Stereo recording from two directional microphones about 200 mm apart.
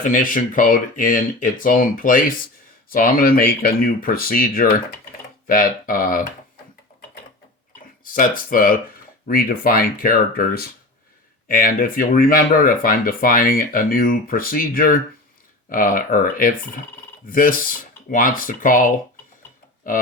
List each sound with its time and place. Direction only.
0.0 s speech: 40° left (ahead or behind)
8.0 s speech: 45° left (ahead or behind)